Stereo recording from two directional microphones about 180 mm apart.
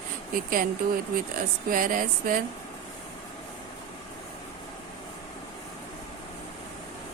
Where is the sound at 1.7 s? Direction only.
50° right (ahead or behind).